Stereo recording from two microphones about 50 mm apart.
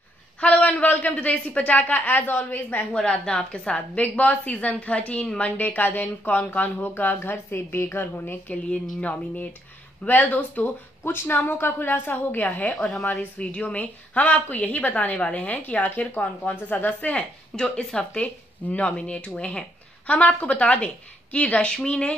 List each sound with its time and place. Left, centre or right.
0.4 s a man's voice: left
3.0 s a woman's voice: centre; by 6.9 s left
6.9 s a woman's voice: left
8.5 s a woman's voice: left
12.4 s a woman's voice: left